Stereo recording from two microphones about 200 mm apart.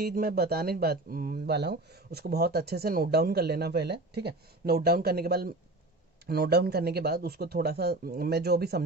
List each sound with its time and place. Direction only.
0.0 s speech: 50° right (ahead or behind)